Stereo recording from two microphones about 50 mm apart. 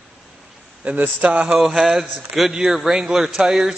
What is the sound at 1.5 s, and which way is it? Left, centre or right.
A man's voice, centre.